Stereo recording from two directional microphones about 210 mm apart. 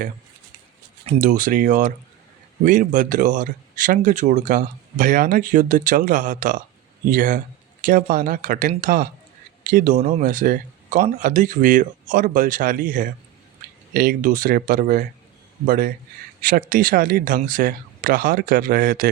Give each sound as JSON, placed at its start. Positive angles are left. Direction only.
{"t": 1.0, "sound": "a man's voice", "side_deg": -35}